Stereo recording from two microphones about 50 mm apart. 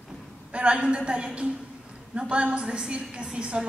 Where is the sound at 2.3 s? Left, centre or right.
Right.